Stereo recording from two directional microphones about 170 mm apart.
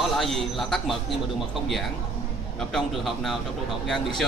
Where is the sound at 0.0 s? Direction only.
Centre (ahead or behind).